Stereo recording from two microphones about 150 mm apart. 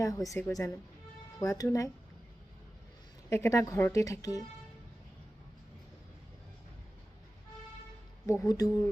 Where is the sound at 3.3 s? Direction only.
20° left (ahead or behind).